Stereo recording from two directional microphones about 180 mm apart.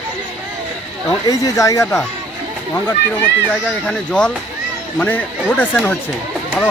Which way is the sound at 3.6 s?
5° left (ahead or behind).